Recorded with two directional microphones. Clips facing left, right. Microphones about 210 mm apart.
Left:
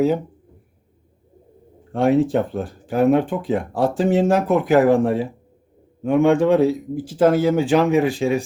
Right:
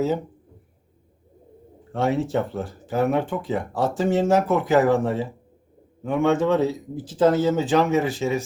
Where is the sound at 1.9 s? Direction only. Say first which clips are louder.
Left 6 dB; 15° left (ahead or behind).